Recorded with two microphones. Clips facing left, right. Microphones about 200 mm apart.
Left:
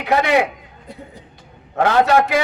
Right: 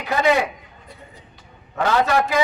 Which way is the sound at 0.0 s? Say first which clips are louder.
Left 2 dB; 65° left (ahead or behind).